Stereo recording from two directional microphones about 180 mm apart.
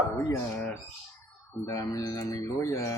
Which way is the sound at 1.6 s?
20° left (ahead or behind).